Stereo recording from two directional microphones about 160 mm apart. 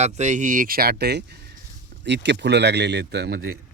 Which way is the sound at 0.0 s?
45° right (ahead or behind).